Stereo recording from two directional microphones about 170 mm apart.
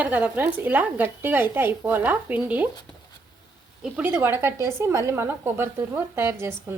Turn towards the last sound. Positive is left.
turn(degrees=-15)  # may be behind; listen again after turning